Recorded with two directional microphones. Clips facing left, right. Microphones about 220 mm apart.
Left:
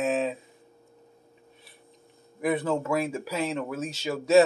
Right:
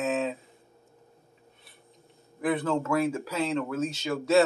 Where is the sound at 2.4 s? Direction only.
10° left (ahead or behind).